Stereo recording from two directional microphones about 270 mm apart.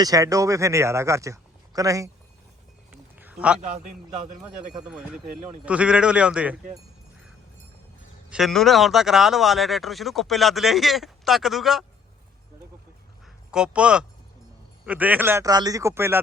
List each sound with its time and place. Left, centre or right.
0.0 s a man's voice: centre
3.2 s a sound: centre
4.1 s a man's voice: right
4.7 s speech: centre
8.3 s speech: centre
13.5 s a man's voice: centre